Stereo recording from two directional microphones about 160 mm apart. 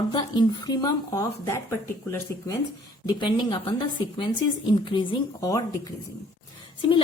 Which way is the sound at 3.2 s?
30° left (ahead or behind).